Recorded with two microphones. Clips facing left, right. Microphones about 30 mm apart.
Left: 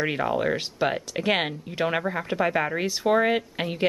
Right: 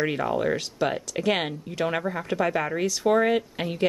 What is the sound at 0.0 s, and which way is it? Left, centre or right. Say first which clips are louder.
Speech: even; centre.